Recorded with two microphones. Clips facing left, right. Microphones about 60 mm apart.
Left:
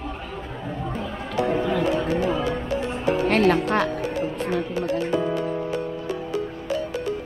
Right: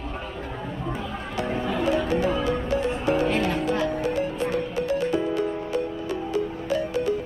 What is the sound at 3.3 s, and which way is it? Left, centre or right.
Music, left.